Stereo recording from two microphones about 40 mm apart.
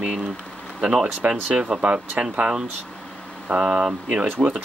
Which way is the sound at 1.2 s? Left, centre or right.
Right.